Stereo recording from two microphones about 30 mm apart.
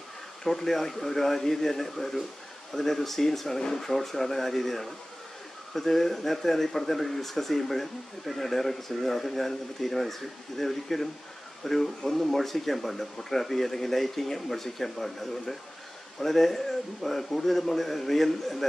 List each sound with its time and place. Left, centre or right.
0.4 s speech: centre